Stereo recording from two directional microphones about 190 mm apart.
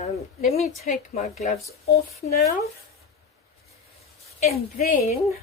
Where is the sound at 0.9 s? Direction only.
35° left (ahead or behind).